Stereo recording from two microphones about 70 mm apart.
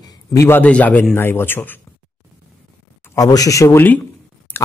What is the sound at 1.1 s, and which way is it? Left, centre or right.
Speech, left.